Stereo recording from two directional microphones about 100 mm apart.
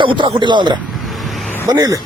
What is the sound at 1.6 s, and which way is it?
Speech, 35° right (ahead or behind).